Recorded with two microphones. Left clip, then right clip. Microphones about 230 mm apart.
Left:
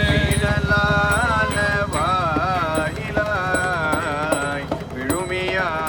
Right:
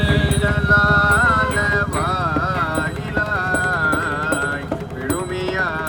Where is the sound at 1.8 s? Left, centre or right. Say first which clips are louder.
Even; left.